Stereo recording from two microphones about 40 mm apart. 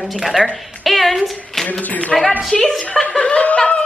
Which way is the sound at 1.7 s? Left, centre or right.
Left.